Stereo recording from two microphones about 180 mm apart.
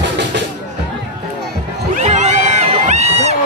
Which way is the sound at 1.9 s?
40° right (ahead or behind).